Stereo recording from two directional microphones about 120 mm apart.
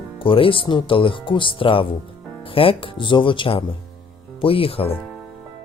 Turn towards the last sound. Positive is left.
turn(degrees=50)  # may be behind; listen again after turning